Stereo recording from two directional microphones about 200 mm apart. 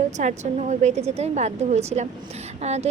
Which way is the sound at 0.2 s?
35° right (ahead or behind).